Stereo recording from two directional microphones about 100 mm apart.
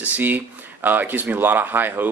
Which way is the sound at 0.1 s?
20° right (ahead or behind).